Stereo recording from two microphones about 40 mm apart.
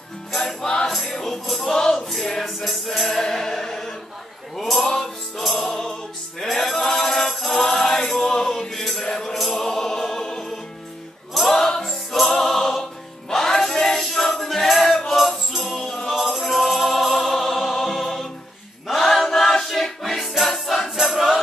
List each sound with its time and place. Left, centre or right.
0.3 s music: centre
5.4 s music: centre
6.4 s choir: centre
8.5 s music: centre
18.9 s choir: centre
20.9 s music: centre